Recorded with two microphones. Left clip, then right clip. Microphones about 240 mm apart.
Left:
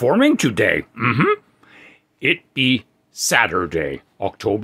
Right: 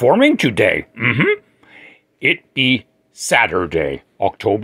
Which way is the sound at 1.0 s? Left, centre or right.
Centre.